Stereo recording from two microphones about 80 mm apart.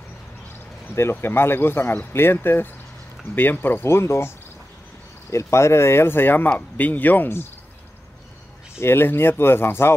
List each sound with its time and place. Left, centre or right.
0.8 s speech: left
5.3 s speech: left
8.7 s speech: left